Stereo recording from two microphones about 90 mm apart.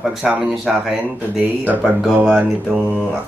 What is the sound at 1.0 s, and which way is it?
Speech, 20° right (ahead or behind).